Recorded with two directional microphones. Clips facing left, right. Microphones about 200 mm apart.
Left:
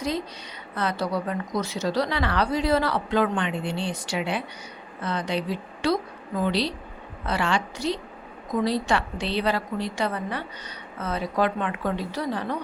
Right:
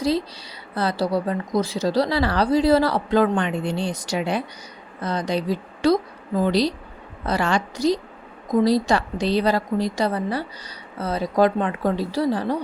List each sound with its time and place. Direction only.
0.7 s speech: 35° right (ahead or behind)